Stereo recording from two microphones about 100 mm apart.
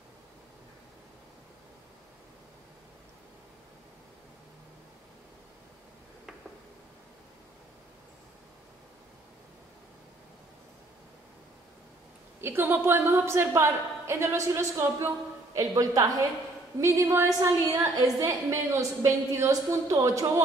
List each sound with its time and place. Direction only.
12.4 s a woman's voice: 25° right (ahead or behind)